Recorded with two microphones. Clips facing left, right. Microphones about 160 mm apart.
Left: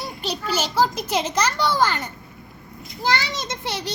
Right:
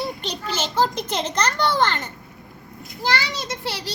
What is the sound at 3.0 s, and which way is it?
Speech, 20° left (ahead or behind).